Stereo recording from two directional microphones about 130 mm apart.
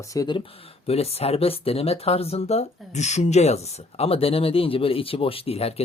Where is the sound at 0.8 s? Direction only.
50° left (ahead or behind).